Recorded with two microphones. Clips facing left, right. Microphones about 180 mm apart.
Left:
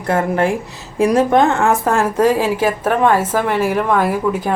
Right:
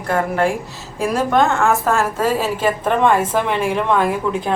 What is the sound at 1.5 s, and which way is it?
A woman's voice, 20° left (ahead or behind).